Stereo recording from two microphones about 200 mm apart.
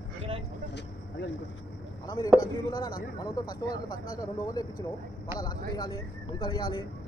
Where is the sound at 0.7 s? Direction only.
60° left (ahead or behind).